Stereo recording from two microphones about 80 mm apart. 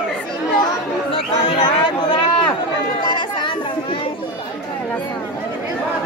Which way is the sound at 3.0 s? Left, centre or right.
Left.